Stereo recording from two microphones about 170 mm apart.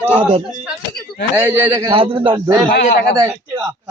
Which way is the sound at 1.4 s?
15° right (ahead or behind).